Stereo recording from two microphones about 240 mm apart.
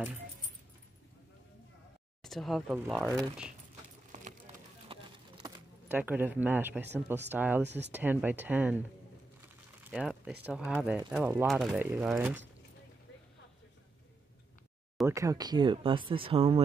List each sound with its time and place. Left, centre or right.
2.2 s speech: centre
4.1 s a sound: right
5.4 s speech: centre
9.8 s speech: centre
15.0 s speech: centre